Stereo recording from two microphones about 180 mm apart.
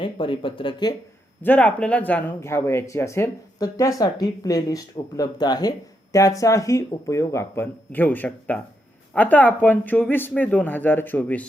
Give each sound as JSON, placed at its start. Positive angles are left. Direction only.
{"t": 0.0, "sound": "speech", "side_deg": 30}
{"t": 1.4, "sound": "speech", "side_deg": 10}